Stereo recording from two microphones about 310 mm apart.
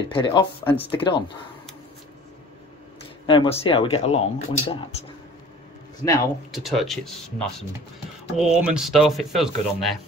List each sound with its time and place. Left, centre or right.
0.1 s speech: centre
3.3 s speech: centre
6.0 s speech: centre
6.5 s speech: centre